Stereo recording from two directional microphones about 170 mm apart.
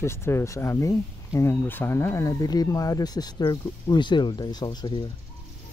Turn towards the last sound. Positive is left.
turn(degrees=25)  # may be behind; listen again after turning